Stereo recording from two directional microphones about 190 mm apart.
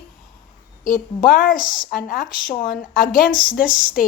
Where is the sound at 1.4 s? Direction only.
45° left (ahead or behind).